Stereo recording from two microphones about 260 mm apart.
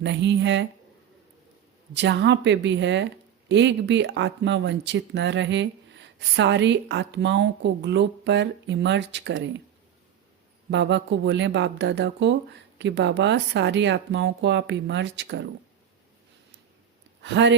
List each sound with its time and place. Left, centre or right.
0.0 s speech: right
1.9 s speech: right
10.7 s speech: right
17.2 s speech: right